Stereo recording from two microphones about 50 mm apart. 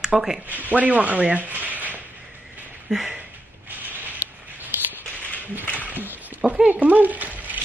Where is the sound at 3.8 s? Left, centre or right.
Right.